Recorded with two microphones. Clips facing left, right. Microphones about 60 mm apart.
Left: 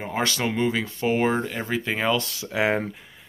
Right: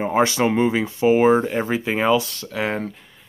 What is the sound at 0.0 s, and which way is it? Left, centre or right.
Speech, centre.